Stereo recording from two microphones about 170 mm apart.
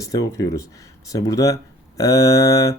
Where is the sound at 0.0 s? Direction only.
20° left (ahead or behind).